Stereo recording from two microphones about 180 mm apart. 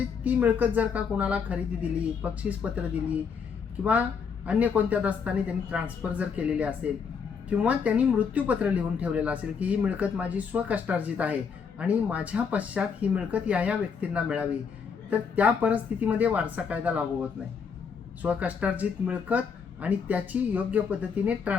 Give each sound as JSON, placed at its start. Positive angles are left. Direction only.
{"t": 0.3, "sound": "speech", "side_deg": -10}
{"t": 4.4, "sound": "speech", "side_deg": -10}
{"t": 18.2, "sound": "speech", "side_deg": -10}